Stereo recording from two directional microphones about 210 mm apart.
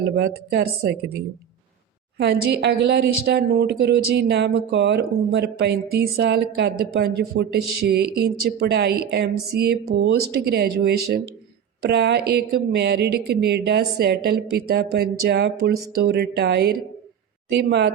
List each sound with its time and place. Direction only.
0.5 s a woman's voice: 50° right (ahead or behind)
2.1 s a woman's voice: 55° right (ahead or behind)